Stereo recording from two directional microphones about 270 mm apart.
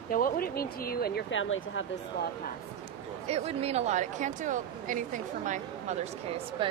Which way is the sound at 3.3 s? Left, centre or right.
Right.